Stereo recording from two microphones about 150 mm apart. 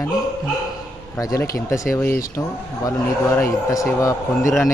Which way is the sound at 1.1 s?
20° left (ahead or behind).